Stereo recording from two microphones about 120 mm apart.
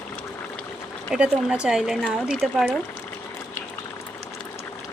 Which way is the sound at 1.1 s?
10° right (ahead or behind).